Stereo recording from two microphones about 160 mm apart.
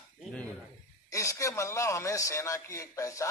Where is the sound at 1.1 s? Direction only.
20° left (ahead or behind).